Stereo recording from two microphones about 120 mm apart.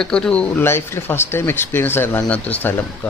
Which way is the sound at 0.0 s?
5° left (ahead or behind).